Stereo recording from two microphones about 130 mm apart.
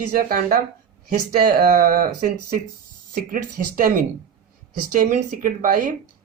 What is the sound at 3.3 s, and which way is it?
Speech, 90° right.